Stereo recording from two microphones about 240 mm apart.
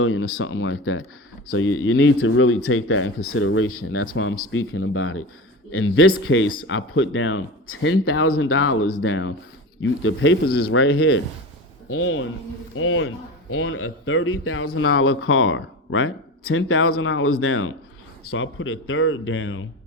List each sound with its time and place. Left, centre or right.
0.0 s speech: left